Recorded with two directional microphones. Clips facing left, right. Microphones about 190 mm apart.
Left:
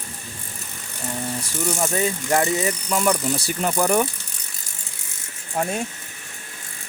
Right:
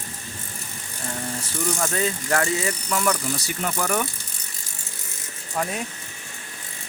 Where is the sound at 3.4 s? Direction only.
30° left (ahead or behind).